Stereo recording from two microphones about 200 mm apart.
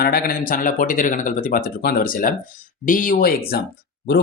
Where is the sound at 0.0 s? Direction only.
50° left (ahead or behind).